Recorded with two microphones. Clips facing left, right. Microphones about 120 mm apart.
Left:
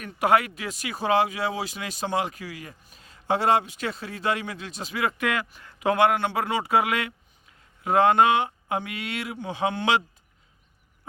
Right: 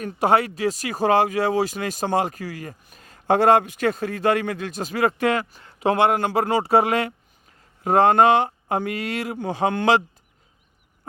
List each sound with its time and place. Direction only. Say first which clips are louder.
0.0 s speech: right 3 dB; 30° right (ahead or behind)
6.1 s speech: right 5 dB; 40° right (ahead or behind)